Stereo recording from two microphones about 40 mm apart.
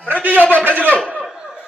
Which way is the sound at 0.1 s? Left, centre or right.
Right.